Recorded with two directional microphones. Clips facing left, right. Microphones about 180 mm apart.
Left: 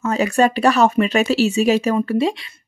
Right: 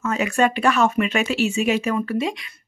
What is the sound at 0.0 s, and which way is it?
Speech, 35° left (ahead or behind).